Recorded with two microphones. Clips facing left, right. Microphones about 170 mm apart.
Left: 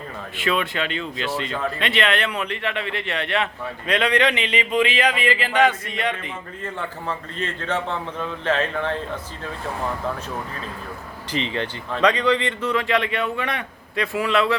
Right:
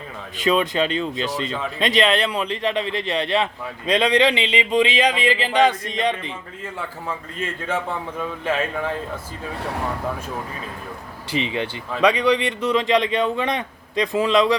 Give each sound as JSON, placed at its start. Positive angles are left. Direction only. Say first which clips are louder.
{"t": 0.7, "sound": "speech", "louder": "right 5 dB", "side_deg": -35}
{"t": 1.1, "sound": "speech", "louder": "right 1 dB", "side_deg": -20}
{"t": 1.8, "sound": "speech", "louder": "right 5 dB", "side_deg": -35}
{"t": 3.8, "sound": "a man's voice", "louder": "right 3 dB", "side_deg": -15}
{"t": 6.7, "sound": "a man's voice", "louder": "even", "side_deg": -10}
{"t": 11.3, "sound": "a man's voice", "louder": "right 2 dB", "side_deg": -15}